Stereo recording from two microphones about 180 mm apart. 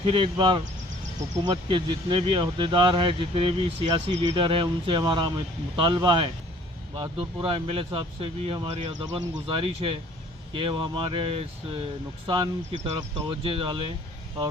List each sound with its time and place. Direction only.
0.0 s speech: 30° right (ahead or behind)